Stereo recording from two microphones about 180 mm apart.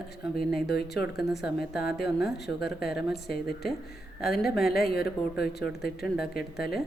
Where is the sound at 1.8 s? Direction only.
60° left (ahead or behind).